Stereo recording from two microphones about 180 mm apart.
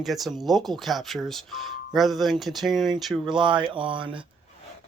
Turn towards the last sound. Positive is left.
turn(degrees=-30)  # may be behind; listen again after turning